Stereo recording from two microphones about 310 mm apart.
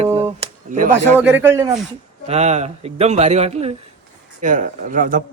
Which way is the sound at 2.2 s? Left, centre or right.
Right.